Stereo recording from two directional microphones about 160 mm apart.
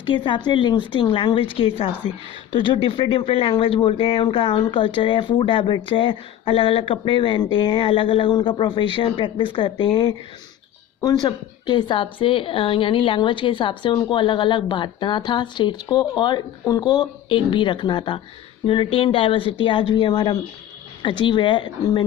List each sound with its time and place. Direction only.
0.0 s speech: 30° left (ahead or behind)